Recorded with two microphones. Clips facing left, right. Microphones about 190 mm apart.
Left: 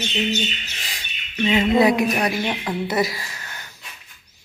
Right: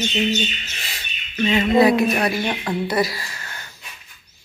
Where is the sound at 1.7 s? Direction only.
15° left (ahead or behind).